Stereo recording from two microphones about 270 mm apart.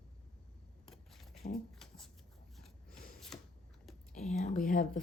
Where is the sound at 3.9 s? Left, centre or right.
Centre.